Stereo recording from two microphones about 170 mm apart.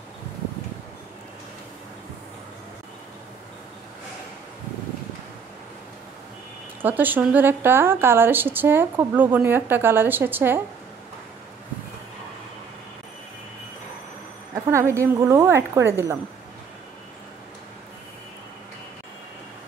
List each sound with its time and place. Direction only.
6.8 s a woman's voice: 10° right (ahead or behind)
14.5 s a woman's voice: 15° right (ahead or behind)